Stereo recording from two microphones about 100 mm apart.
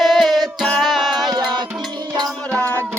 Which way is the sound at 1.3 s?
45° right (ahead or behind).